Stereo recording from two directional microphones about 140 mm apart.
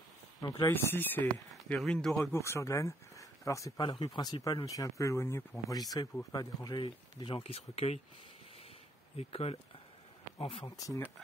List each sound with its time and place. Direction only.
0.4 s speech: 25° left (ahead or behind)
0.7 s speech: 15° left (ahead or behind)
1.5 s speech: 5° left (ahead or behind)
2.3 s speech: 20° left (ahead or behind); by 8.0 s 45° left (ahead or behind)
9.1 s speech: 45° left (ahead or behind)